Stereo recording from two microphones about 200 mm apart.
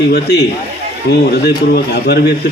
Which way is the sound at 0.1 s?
55° left (ahead or behind).